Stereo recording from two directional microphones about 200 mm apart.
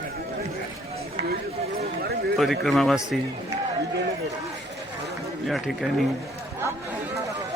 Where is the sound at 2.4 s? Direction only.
Centre (ahead or behind).